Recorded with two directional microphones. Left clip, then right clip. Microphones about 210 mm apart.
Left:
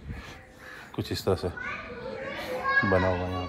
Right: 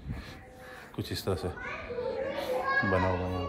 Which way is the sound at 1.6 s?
55° right (ahead or behind).